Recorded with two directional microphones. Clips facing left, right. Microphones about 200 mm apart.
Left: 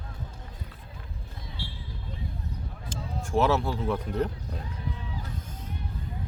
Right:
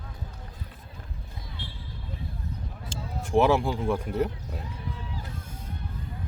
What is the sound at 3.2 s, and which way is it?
Speech, 15° right (ahead or behind).